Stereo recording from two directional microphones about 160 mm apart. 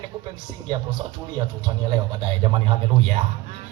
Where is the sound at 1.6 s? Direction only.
30° right (ahead or behind).